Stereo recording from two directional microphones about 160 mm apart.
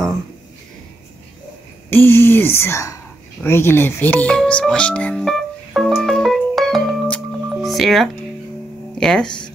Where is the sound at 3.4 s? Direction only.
15° left (ahead or behind).